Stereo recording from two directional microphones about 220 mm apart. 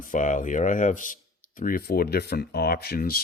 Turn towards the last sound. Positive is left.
turn(degrees=45)  # may be behind; listen again after turning